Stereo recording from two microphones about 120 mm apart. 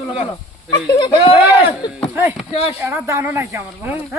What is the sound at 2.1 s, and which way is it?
Speech, 20° right (ahead or behind).